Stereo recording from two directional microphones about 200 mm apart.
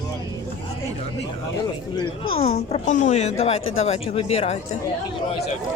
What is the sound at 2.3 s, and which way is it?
Speech, 30° left (ahead or behind).